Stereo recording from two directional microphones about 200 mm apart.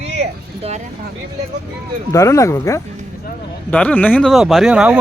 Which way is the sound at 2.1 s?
15° left (ahead or behind).